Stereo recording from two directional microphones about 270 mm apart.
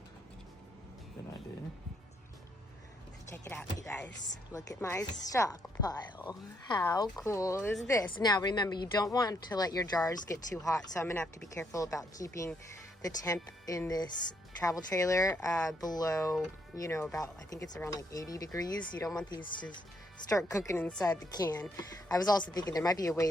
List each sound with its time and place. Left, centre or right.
3.2 s speech: centre
20.3 s speech: centre